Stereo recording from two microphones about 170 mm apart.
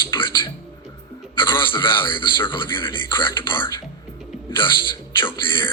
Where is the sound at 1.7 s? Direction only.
30° left (ahead or behind).